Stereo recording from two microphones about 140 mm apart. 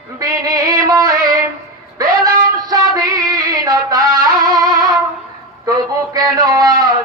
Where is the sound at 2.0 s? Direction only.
25° right (ahead or behind).